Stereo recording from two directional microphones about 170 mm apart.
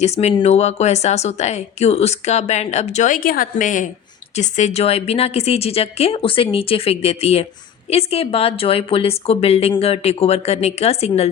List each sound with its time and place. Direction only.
0.0 s a woman's voice: 40° left (ahead or behind)